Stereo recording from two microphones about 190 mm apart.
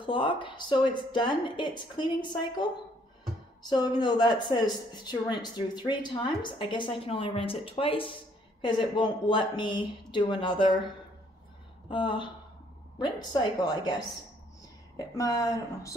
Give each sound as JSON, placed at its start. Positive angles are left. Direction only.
{"t": 0.0, "sound": "a woman's voice", "side_deg": 25}
{"t": 11.9, "sound": "a woman's voice", "side_deg": 25}
{"t": 15.0, "sound": "a woman's voice", "side_deg": 20}